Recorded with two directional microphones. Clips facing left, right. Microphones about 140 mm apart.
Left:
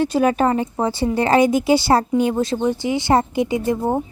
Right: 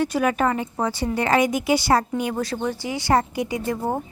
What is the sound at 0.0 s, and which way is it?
A woman's voice, 30° left (ahead or behind).